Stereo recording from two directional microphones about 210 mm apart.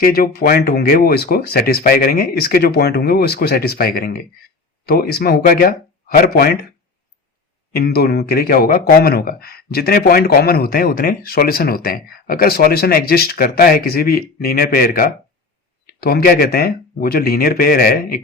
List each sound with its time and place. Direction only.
0.0 s speech: 45° left (ahead or behind)
7.8 s speech: 50° left (ahead or behind)